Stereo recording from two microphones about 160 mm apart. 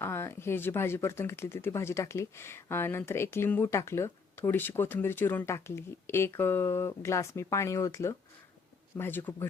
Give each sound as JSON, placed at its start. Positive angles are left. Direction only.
{"t": 0.0, "sound": "speech", "side_deg": 15}